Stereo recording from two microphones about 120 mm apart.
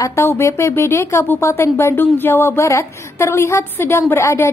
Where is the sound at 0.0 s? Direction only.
25° left (ahead or behind).